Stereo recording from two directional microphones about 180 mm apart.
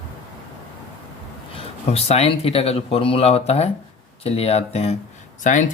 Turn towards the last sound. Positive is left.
turn(degrees=45)  # may be behind; listen again after turning